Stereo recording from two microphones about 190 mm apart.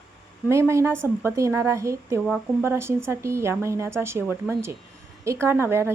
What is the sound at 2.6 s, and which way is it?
A woman's voice, 15° right (ahead or behind).